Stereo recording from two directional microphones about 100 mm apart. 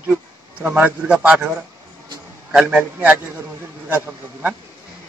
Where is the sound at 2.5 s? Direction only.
10° right (ahead or behind).